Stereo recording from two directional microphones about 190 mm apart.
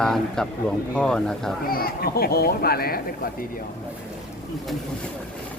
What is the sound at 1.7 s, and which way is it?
Speech, 50° left (ahead or behind).